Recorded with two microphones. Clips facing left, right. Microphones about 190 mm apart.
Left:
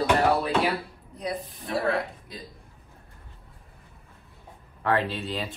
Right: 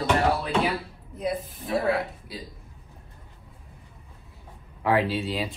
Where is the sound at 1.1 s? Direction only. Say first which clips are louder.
Right 3 dB; 5° right (ahead or behind).